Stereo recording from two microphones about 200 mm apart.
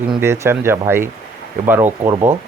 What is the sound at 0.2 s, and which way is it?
Speech, 10° right (ahead or behind).